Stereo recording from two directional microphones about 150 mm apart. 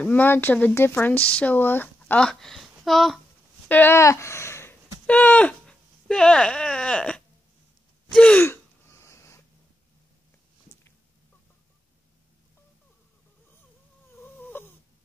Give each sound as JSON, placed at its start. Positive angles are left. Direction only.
{"t": 0.0, "sound": "speech", "side_deg": 10}
{"t": 3.6, "sound": "speech", "side_deg": 15}
{"t": 8.1, "sound": "gasp", "side_deg": 5}
{"t": 14.2, "sound": "snoring", "side_deg": 15}